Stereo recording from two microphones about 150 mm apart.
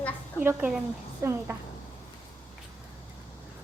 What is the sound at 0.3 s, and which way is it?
A woman's voice, 10° right (ahead or behind).